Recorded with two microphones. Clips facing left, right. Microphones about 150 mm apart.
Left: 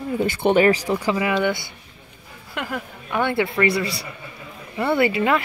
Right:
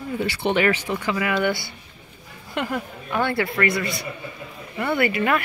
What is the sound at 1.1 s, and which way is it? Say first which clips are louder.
Speech: left 1 dB; 20° left (ahead or behind).